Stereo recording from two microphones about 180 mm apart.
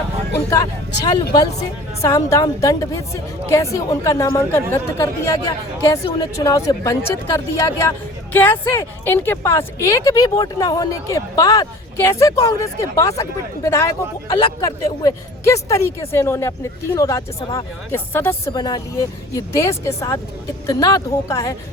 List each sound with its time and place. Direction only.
1.0 s a woman's voice: 25° left (ahead or behind)